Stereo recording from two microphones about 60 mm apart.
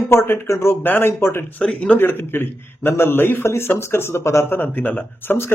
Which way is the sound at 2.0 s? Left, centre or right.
Left.